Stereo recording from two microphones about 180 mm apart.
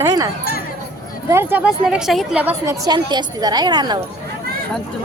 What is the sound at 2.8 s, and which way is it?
A woman's voice, 25° right (ahead or behind).